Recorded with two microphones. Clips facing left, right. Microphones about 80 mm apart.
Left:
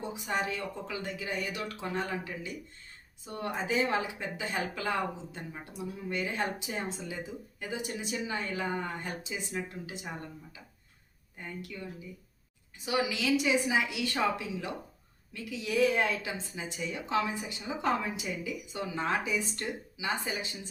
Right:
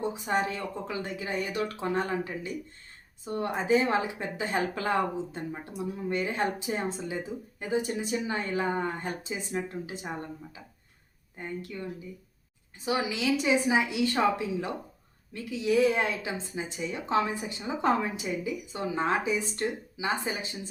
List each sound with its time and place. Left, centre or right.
0.0 s a woman's voice: right